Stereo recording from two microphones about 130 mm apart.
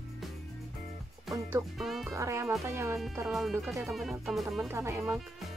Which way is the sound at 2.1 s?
20° right (ahead or behind).